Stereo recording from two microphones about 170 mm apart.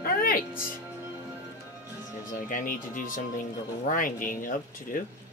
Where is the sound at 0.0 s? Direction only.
55° left (ahead or behind).